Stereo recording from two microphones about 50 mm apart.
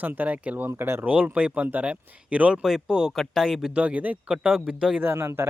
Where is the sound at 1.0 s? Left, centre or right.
Right.